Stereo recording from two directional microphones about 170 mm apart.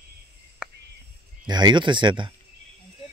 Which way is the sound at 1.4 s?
25° right (ahead or behind).